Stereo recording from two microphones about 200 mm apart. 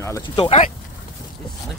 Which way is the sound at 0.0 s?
20° left (ahead or behind).